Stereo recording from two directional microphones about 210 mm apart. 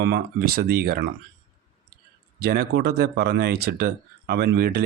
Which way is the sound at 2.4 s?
50° right (ahead or behind).